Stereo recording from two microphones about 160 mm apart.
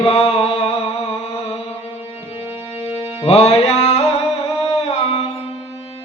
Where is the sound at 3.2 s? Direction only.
40° left (ahead or behind).